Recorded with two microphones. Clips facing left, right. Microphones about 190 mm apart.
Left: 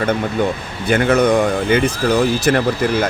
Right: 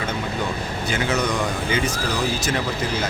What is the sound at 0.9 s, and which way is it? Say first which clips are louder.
Speech: left 10 dB; 55° left (ahead or behind).